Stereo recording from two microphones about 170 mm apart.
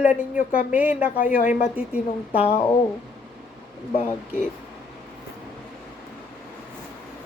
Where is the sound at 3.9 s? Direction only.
50° left (ahead or behind).